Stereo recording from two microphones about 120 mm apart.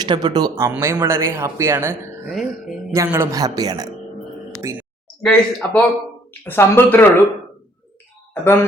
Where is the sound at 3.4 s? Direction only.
30° right (ahead or behind).